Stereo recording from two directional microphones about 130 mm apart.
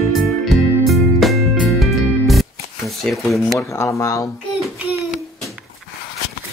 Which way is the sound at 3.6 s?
20° left (ahead or behind).